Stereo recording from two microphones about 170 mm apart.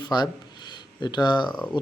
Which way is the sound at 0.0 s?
25° left (ahead or behind).